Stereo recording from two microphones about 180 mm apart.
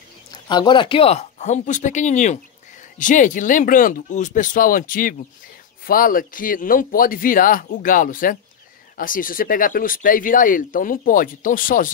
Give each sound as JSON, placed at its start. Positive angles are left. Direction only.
{"t": 0.3, "sound": "speech", "side_deg": 25}